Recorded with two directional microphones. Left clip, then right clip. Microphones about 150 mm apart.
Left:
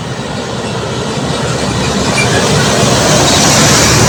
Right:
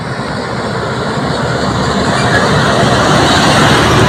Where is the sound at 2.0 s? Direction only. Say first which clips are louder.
Even; 30° left (ahead or behind).